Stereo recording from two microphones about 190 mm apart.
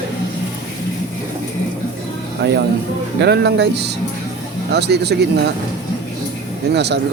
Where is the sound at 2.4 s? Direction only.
65° right (ahead or behind).